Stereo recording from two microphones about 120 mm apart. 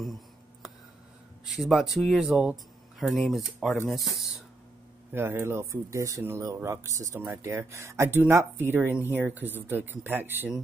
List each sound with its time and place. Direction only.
0.0 s a sound: centre (ahead or behind)
1.4 s speech: centre (ahead or behind)
5.1 s speech: 20° right (ahead or behind)